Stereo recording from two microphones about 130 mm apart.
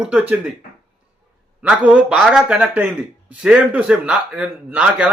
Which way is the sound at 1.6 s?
10° right (ahead or behind).